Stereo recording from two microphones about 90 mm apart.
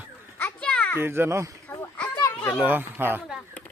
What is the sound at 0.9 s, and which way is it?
Speech, 25° right (ahead or behind).